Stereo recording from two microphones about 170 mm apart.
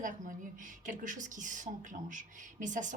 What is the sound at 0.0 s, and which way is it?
A woman's voice, 50° right (ahead or behind).